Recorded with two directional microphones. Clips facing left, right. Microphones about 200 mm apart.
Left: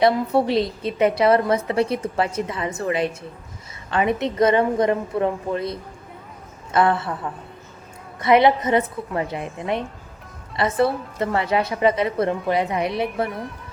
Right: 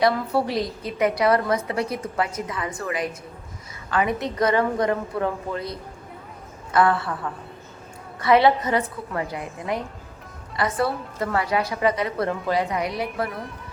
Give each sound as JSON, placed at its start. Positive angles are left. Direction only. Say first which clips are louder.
{"t": 0.0, "sound": "a woman's voice", "louder": "left 3 dB", "side_deg": 25}
{"t": 8.2, "sound": "a woman's voice", "louder": "left 2 dB", "side_deg": 20}